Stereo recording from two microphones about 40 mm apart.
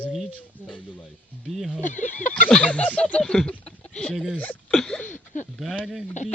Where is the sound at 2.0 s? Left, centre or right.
Left.